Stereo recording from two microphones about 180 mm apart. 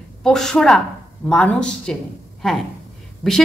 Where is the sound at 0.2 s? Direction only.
5° left (ahead or behind).